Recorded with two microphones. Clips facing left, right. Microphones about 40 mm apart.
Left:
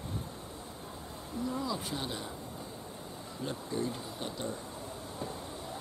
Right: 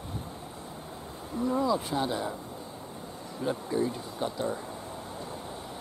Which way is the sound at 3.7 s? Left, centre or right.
Centre.